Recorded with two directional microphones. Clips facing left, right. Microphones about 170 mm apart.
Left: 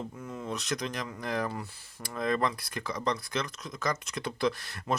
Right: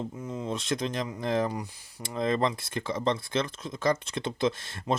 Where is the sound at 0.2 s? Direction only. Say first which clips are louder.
Right 3 dB; 20° right (ahead or behind).